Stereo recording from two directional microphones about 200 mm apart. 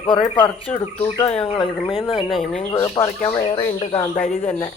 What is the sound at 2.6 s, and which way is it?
Speech, 20° left (ahead or behind).